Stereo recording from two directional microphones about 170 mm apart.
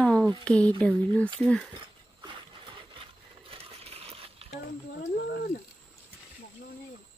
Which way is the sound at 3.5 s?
35° right (ahead or behind).